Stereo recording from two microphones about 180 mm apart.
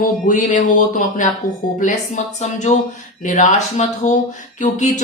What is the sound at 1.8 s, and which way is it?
Speech, 40° left (ahead or behind).